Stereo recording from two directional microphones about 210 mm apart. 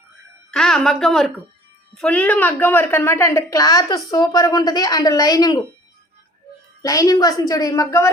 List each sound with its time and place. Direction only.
0.5 s a woman's voice: centre (ahead or behind); by 5.6 s 20° left (ahead or behind)
6.8 s a woman's voice: 15° left (ahead or behind)